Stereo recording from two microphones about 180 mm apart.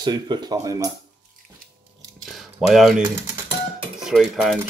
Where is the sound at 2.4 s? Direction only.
Centre (ahead or behind).